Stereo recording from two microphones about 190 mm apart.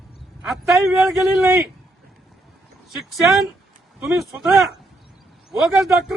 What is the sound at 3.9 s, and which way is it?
Speech, 10° right (ahead or behind).